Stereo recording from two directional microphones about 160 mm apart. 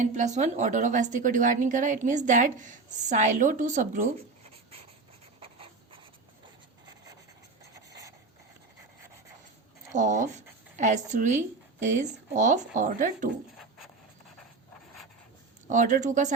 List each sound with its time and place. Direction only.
0.0 s a woman's voice: 50° right (ahead or behind)
5.4 s writing: 35° right (ahead or behind)
7.9 s a sound: 20° right (ahead or behind)
9.9 s a woman's voice: 50° right (ahead or behind)
15.6 s a woman's voice: 50° right (ahead or behind)